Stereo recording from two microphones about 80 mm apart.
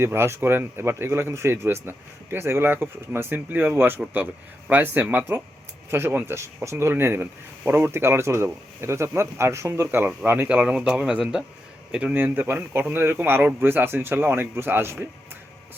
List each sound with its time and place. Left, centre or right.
0.0 s a man's voice: right
10.5 s a man's voice: centre; by 14.9 s right